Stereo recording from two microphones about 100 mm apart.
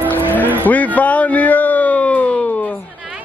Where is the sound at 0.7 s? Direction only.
15° left (ahead or behind).